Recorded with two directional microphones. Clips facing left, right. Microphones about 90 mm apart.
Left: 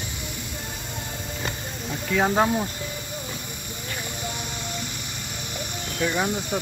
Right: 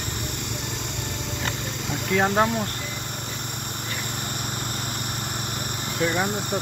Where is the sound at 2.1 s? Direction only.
5° left (ahead or behind).